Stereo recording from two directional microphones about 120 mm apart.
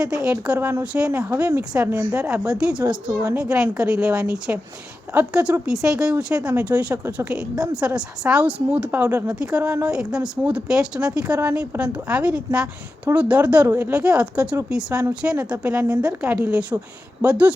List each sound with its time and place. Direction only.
0.0 s speech: 5° right (ahead or behind)
0.9 s speech: 10° right (ahead or behind)